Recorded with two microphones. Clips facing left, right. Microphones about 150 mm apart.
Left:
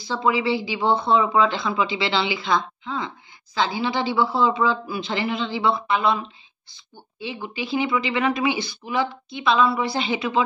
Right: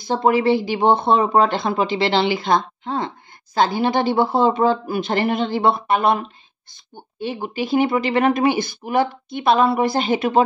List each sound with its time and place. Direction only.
0.0 s speech: 50° right (ahead or behind)